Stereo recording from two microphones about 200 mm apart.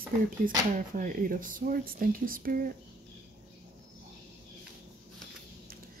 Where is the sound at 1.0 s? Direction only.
45° right (ahead or behind).